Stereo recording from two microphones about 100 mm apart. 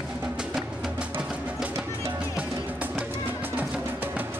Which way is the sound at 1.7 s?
25° right (ahead or behind).